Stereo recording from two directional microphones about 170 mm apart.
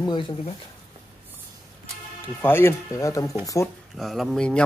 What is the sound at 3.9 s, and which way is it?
Speech, centre (ahead or behind).